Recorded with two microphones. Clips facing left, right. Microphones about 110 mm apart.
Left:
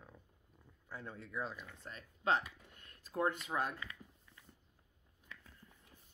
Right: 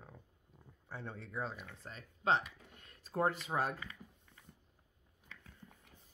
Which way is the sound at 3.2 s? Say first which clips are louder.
Right 2 dB; 30° right (ahead or behind).